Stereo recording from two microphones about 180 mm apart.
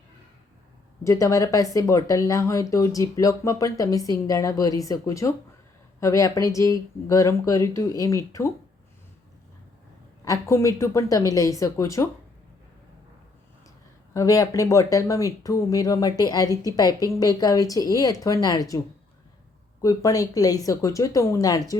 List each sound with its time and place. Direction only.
1.0 s speech: 20° left (ahead or behind)
10.2 s speech: 15° left (ahead or behind)
14.1 s speech: 20° left (ahead or behind)
19.8 s speech: 20° left (ahead or behind)